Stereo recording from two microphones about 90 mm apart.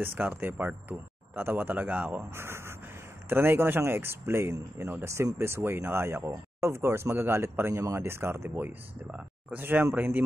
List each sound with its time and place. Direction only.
0.0 s speech: 25° right (ahead or behind)